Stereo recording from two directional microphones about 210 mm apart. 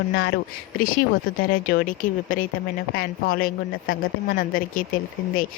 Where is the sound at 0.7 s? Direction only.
40° left (ahead or behind).